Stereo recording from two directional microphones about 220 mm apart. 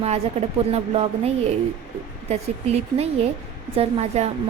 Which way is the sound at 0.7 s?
30° right (ahead or behind).